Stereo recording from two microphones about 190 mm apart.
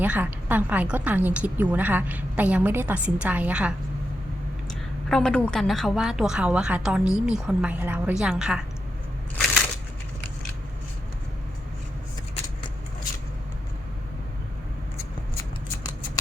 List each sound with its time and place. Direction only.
0.0 s a woman's voice: 10° right (ahead or behind)